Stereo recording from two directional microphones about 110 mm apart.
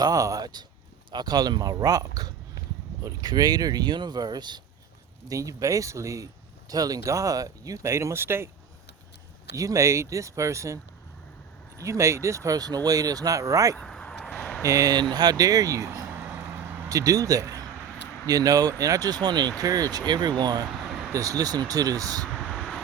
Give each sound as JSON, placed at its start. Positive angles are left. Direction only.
{"t": 0.0, "sound": "speech", "side_deg": -35}
{"t": 9.6, "sound": "speech", "side_deg": -30}
{"t": 11.8, "sound": "speech", "side_deg": -25}
{"t": 13.7, "sound": "a sound", "side_deg": 5}
{"t": 14.6, "sound": "speech", "side_deg": -30}
{"t": 16.1, "sound": "vehicle", "side_deg": -15}
{"t": 16.9, "sound": "speech", "side_deg": -30}
{"t": 20.7, "sound": "a sound", "side_deg": 0}
{"t": 21.1, "sound": "speech", "side_deg": -30}
{"t": 22.3, "sound": "vehicle", "side_deg": 10}